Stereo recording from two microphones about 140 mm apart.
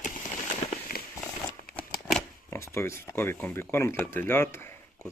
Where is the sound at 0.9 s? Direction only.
90° left.